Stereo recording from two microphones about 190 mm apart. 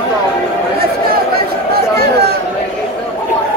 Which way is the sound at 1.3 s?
55° right (ahead or behind).